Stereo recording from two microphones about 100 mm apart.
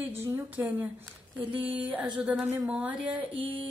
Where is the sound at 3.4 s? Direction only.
65° right (ahead or behind).